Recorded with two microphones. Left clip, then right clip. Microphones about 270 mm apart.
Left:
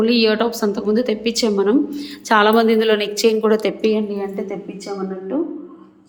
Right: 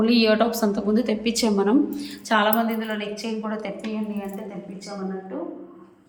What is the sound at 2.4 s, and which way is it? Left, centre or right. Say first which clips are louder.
Speech: left 8 dB; left.